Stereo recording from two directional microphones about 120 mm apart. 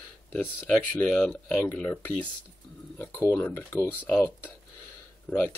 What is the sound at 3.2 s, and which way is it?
Speech, 15° left (ahead or behind).